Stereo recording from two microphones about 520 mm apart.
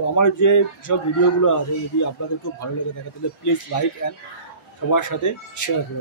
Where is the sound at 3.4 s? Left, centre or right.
Left.